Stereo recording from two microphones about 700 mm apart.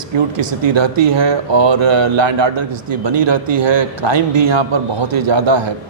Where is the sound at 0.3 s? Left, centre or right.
Right.